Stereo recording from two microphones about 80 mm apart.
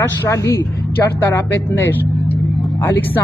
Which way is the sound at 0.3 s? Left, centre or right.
Left.